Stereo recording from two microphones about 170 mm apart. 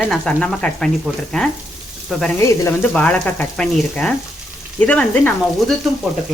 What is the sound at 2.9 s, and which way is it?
Speech, 5° left (ahead or behind).